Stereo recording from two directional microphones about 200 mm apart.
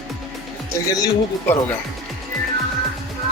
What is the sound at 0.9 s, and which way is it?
Speech, 15° left (ahead or behind).